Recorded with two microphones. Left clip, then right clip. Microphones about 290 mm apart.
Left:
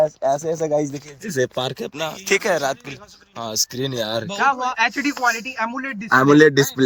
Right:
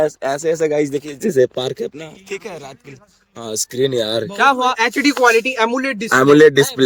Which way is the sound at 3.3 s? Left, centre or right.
Centre.